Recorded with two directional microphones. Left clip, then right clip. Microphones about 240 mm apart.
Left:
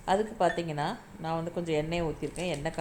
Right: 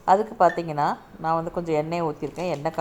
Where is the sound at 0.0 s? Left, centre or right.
Centre.